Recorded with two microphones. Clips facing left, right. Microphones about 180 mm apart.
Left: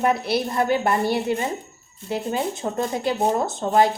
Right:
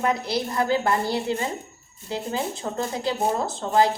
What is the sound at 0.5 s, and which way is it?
A woman's voice, 20° left (ahead or behind).